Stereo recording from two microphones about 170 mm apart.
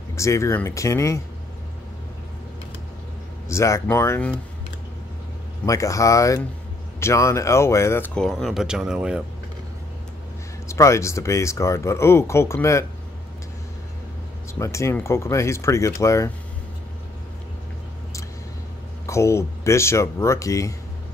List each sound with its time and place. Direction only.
0.1 s speech: 15° left (ahead or behind)
3.4 s speech: 15° left (ahead or behind)
5.7 s speech: 20° left (ahead or behind); by 9.2 s 5° right (ahead or behind)
10.7 s speech: 15° left (ahead or behind)
14.5 s speech: 15° left (ahead or behind)
19.0 s speech: 15° left (ahead or behind)